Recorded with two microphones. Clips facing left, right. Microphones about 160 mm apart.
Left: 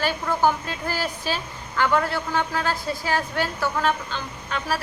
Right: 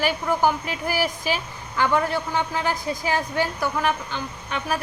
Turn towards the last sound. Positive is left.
turn(degrees=-15)  # may be behind; listen again after turning